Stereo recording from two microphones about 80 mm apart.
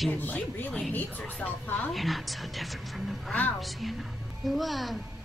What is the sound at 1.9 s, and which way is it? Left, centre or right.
A woman's voice, centre.